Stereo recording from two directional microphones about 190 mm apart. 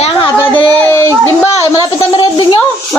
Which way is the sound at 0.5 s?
15° left (ahead or behind).